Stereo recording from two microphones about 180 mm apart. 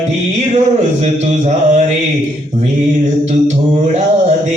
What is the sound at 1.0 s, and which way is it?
Mantra, 40° right (ahead or behind).